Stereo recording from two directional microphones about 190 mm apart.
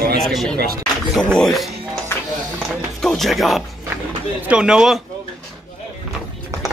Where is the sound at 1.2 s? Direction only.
5° left (ahead or behind).